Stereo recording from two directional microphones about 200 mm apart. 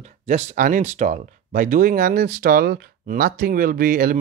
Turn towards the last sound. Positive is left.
turn(degrees=-45)  # may be behind; listen again after turning